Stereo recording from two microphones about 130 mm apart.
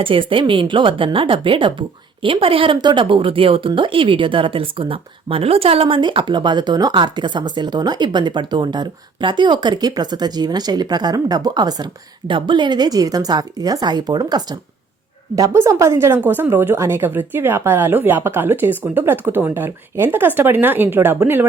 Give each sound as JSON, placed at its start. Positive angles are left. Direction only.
{"t": 0.0, "sound": "a woman's voice", "side_deg": -40}